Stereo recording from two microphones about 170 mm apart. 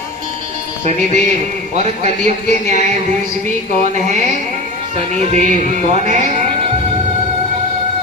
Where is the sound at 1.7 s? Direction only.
40° right (ahead or behind).